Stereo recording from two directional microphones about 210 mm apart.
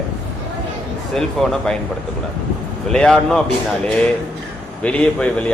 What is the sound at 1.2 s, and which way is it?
Speech, centre (ahead or behind).